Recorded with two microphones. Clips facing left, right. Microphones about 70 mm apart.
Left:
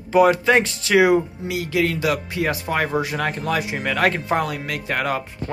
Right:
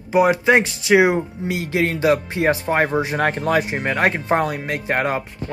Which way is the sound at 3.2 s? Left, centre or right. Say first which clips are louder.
Right 4 dB; right.